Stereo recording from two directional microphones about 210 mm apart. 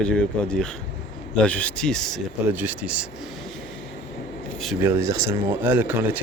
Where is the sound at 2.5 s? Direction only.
10° right (ahead or behind).